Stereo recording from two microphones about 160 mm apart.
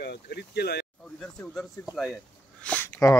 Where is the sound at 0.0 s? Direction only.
85° left.